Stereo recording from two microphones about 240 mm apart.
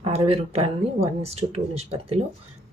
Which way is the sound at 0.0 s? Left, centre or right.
Right.